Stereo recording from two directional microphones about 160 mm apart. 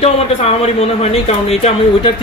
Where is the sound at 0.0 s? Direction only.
40° left (ahead or behind).